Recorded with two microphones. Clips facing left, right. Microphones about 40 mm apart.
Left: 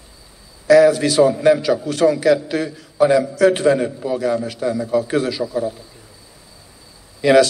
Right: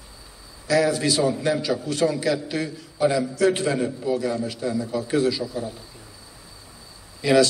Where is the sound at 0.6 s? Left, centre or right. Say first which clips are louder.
Left 9 dB; left.